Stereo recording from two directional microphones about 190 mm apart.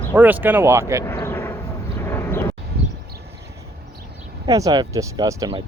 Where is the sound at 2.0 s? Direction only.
10° left (ahead or behind).